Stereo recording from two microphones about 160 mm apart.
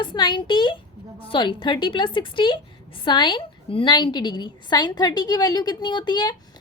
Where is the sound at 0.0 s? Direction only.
30° left (ahead or behind).